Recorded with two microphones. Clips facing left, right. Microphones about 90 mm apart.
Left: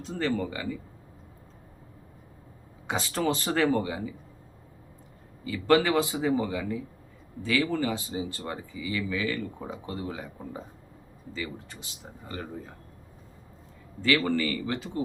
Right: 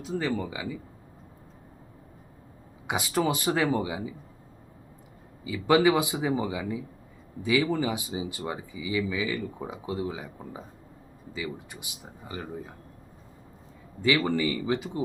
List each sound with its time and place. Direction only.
0.0 s speech: 5° right (ahead or behind)
2.8 s speech: 10° right (ahead or behind)
5.5 s speech: 10° right (ahead or behind)
14.0 s speech: 15° right (ahead or behind)